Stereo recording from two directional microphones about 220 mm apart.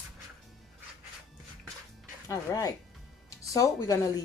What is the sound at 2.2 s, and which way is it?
Speech, 15° left (ahead or behind).